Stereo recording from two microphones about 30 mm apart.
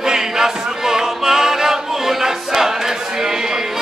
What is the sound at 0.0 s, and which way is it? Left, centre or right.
Music, centre.